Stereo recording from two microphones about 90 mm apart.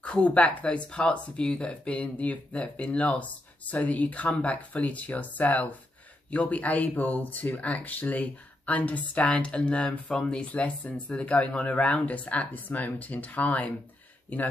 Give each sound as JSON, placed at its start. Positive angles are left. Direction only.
{"t": 0.0, "sound": "speech", "side_deg": 10}